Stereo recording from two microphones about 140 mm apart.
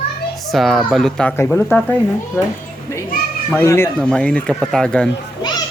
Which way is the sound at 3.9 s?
5° left (ahead or behind).